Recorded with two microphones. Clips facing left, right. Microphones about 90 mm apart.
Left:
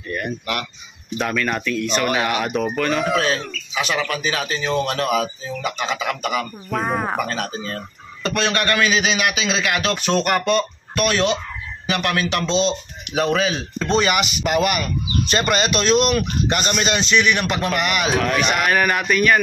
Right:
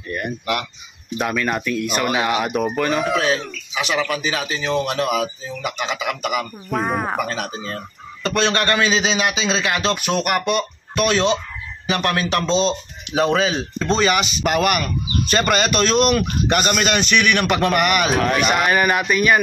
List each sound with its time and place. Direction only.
0.1 s speech: 15° right (ahead or behind)
8.3 s a man's voice: 25° right (ahead or behind)
9.9 s speech: 10° right (ahead or behind)
11.0 s a man's voice: 25° right (ahead or behind)
13.1 s a man's voice: 25° right (ahead or behind)
13.8 s speech: 35° right (ahead or behind)
14.4 s a man's voice: 50° right (ahead or behind)
18.0 s speech: centre (ahead or behind)